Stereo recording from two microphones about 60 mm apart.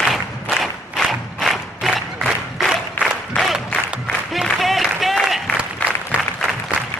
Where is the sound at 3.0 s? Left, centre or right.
Left.